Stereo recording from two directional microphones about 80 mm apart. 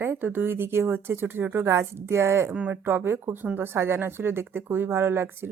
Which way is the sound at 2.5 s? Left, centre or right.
Centre.